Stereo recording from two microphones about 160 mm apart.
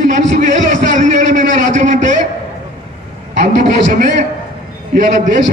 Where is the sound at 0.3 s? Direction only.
55° right (ahead or behind).